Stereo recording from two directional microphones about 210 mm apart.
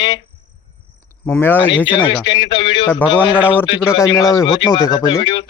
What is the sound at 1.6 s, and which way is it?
Speech, 25° left (ahead or behind).